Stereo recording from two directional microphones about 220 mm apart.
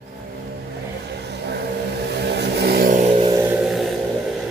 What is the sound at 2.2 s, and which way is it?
Vehicle, 50° right (ahead or behind).